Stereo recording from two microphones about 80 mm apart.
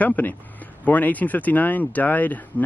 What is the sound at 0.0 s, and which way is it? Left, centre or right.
Speech, left.